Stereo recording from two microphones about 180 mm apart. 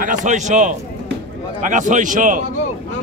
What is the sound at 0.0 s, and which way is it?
A man's voice, 45° right (ahead or behind).